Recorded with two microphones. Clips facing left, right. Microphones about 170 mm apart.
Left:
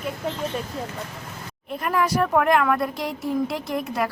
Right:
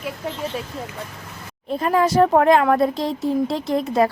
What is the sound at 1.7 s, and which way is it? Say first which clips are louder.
Speech: right 5 dB; 30° right (ahead or behind).